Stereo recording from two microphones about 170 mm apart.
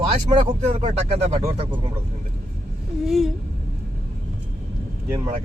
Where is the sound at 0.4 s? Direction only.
45° right (ahead or behind).